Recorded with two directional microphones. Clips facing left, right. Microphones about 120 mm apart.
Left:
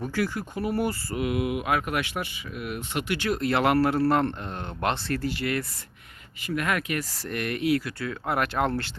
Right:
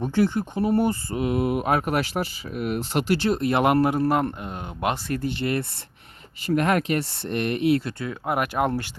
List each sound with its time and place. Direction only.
0.0 s speech: 25° right (ahead or behind)